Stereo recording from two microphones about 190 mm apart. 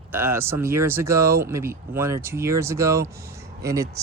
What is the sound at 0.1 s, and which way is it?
Speech, 10° right (ahead or behind).